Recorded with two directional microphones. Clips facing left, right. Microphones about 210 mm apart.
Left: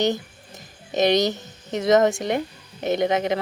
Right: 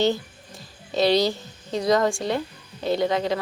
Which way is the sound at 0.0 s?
20° left (ahead or behind).